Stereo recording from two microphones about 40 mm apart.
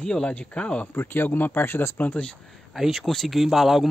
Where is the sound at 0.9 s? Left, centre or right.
Left.